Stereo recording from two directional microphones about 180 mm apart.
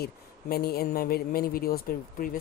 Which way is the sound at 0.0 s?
60° left (ahead or behind).